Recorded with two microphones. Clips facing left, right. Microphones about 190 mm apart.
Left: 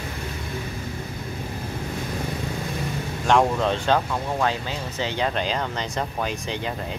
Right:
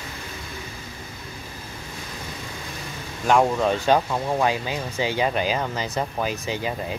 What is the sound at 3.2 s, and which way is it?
Speech, 5° right (ahead or behind).